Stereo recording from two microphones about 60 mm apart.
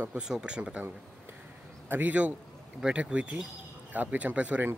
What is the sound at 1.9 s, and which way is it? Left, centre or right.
Speech, right.